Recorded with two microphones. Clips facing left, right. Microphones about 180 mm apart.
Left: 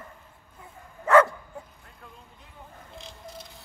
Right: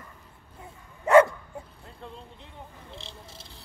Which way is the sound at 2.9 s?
30° right (ahead or behind).